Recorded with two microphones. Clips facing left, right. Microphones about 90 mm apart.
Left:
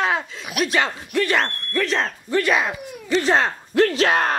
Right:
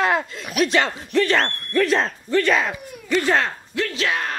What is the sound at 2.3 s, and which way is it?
Speech, 10° left (ahead or behind).